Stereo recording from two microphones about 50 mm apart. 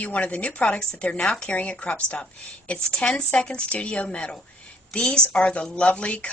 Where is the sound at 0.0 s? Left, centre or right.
Left.